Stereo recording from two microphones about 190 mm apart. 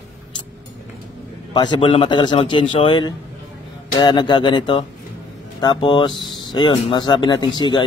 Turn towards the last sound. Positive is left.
turn(degrees=25)  # may be behind; listen again after turning